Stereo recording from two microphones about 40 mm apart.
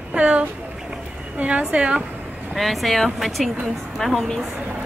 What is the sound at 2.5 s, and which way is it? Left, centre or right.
Speech, centre.